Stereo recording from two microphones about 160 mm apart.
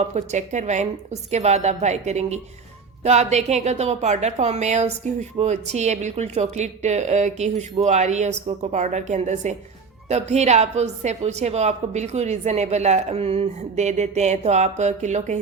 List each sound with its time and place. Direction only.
0.0 s a woman's voice: 45° right (ahead or behind)